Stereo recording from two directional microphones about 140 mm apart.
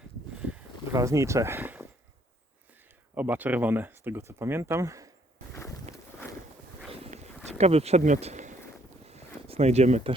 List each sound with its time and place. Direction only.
0.9 s speech: 20° right (ahead or behind)
3.2 s speech: 10° right (ahead or behind)
5.5 s boat: 20° left (ahead or behind)
7.6 s speech: 45° right (ahead or behind)
9.0 s a sound: 50° right (ahead or behind)